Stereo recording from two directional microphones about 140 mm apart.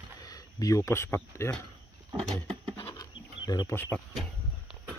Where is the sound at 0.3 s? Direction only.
25° left (ahead or behind).